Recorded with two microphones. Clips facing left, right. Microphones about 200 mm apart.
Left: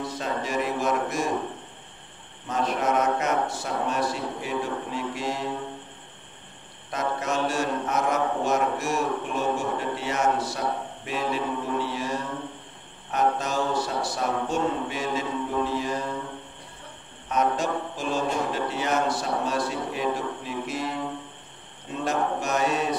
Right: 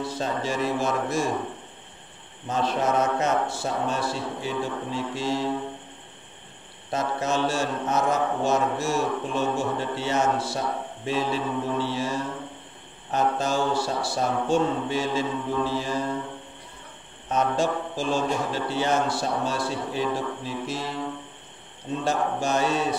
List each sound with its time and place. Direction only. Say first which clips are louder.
0.0 s mantra: right 2 dB; 30° right (ahead or behind)
2.4 s mantra: right 1 dB; 30° right (ahead or behind)
6.9 s mantra: right 2 dB; 30° right (ahead or behind)
13.1 s mantra: right 1 dB; 30° right (ahead or behind)
17.3 s mantra: right 1 dB; 30° right (ahead or behind)
22.0 s mantra: even; 30° right (ahead or behind)